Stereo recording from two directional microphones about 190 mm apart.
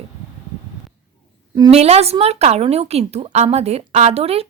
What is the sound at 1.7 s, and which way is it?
A woman's voice, 35° right (ahead or behind).